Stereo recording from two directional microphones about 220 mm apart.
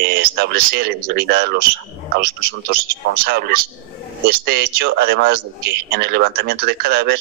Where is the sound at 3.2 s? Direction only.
45° right (ahead or behind).